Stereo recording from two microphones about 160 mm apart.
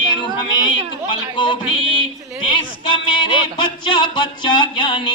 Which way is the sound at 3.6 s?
30° left (ahead or behind).